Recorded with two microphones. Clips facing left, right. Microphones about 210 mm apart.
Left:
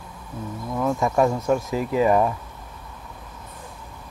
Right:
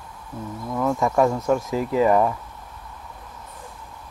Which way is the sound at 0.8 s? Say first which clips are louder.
Right 1 dB; 20° left (ahead or behind).